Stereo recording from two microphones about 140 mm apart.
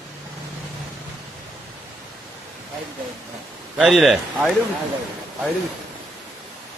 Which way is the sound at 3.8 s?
Centre (ahead or behind).